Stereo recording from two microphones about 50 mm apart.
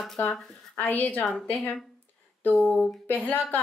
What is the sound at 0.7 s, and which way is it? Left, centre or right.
Speech, left.